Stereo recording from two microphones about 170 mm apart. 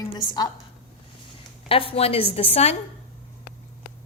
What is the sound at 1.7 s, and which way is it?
A woman's voice, 35° left (ahead or behind).